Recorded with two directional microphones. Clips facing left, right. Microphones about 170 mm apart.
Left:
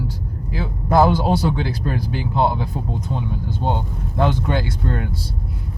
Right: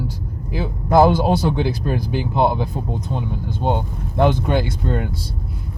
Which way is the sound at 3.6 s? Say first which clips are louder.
Right 3 dB; 15° right (ahead or behind).